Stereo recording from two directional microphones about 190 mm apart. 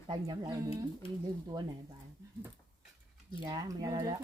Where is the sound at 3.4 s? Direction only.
20° right (ahead or behind).